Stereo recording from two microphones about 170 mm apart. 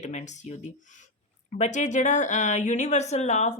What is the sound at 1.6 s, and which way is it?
A woman's voice, 45° left (ahead or behind).